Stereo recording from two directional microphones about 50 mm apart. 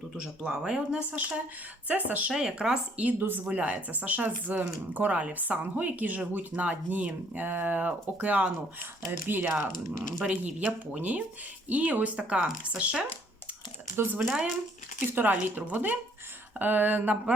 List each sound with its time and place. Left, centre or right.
0.2 s speech: centre
1.9 s a woman's voice: right
2.3 s speech: centre
3.0 s a woman's voice: right
9.0 s speech: right
10.7 s a woman's voice: right
13.9 s speech: right
14.3 s speech: centre
15.1 s a woman's voice: right